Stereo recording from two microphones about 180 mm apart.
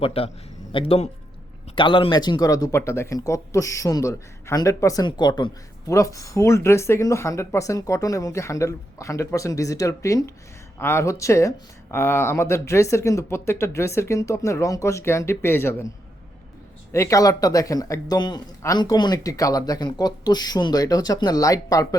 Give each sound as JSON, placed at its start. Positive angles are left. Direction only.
{"t": 0.0, "sound": "speech", "side_deg": 30}
{"t": 16.9, "sound": "speech", "side_deg": 15}